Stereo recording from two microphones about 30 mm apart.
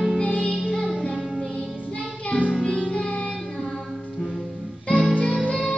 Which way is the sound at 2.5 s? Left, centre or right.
Centre.